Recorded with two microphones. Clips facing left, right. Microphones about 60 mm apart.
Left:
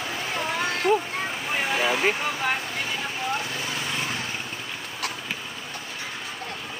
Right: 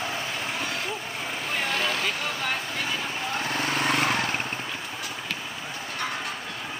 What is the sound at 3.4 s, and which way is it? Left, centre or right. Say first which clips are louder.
Vehicle: right 5 dB; right.